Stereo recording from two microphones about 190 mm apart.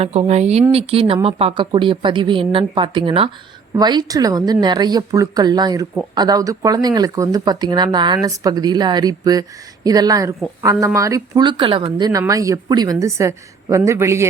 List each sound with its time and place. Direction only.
0.0 s a woman's voice: 35° right (ahead or behind); by 14.3 s 15° right (ahead or behind)